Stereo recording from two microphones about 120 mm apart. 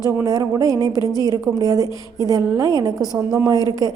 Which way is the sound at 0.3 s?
30° right (ahead or behind).